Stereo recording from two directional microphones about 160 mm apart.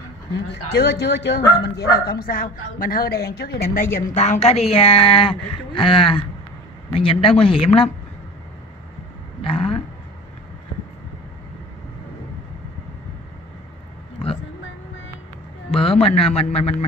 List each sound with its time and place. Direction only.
0.7 s speech: 90° left
2.0 s a woman's voice: 65° left (ahead or behind); by 7.9 s 35° left (ahead or behind)
9.4 s speech: 35° left (ahead or behind)
15.7 s a man's voice: 35° left (ahead or behind)